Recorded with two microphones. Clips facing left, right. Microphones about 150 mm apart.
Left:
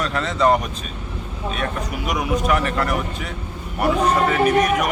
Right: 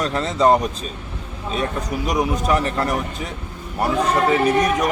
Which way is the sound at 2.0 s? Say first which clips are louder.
Right 1 dB; 35° right (ahead or behind).